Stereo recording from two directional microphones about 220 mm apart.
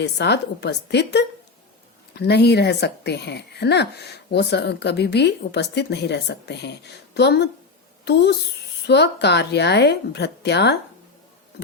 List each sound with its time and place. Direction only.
0.0 s speech: 50° left (ahead or behind)